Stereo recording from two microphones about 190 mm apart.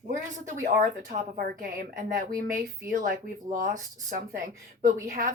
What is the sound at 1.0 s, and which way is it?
A woman's voice, 50° right (ahead or behind).